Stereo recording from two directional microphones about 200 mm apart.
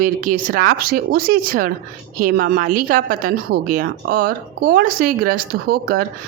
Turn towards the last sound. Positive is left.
turn(degrees=-50)  # may be behind; listen again after turning